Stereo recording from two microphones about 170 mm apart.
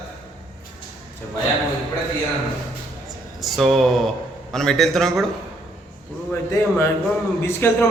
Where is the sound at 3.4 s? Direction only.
Centre (ahead or behind).